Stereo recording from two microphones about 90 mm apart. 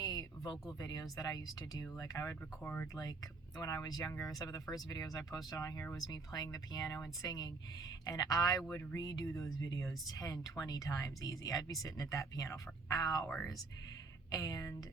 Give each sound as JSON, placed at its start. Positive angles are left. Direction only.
{"t": 0.0, "sound": "a sound", "side_deg": 45}
{"t": 0.8, "sound": "speech", "side_deg": 45}
{"t": 14.3, "sound": "speech", "side_deg": 40}